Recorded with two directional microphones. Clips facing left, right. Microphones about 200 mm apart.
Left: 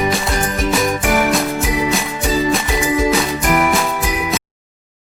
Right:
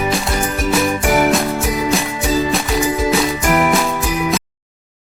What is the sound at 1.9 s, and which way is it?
Music, centre (ahead or behind).